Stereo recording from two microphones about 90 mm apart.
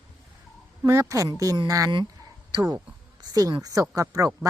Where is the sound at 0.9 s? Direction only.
35° right (ahead or behind).